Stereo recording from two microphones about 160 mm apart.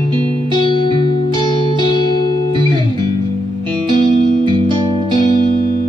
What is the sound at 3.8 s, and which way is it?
Music, 30° right (ahead or behind).